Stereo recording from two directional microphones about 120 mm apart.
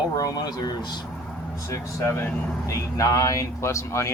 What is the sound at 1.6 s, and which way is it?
Speech, 20° left (ahead or behind).